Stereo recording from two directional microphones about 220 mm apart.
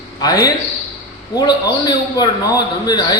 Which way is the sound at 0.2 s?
15° left (ahead or behind).